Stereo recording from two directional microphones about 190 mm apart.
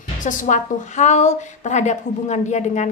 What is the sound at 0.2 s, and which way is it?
A woman's voice, 40° left (ahead or behind).